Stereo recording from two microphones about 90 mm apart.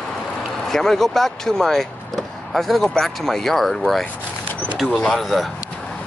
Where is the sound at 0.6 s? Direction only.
5° left (ahead or behind).